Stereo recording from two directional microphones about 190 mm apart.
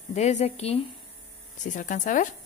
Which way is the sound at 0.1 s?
35° left (ahead or behind).